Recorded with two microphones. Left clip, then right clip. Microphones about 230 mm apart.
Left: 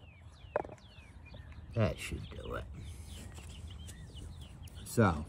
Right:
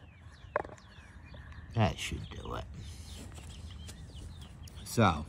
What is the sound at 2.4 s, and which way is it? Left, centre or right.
Speech, right.